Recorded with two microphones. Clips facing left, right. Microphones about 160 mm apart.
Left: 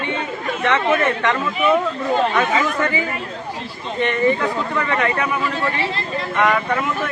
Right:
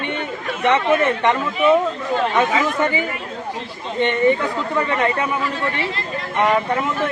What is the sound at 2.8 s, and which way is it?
A man's voice, 25° right (ahead or behind).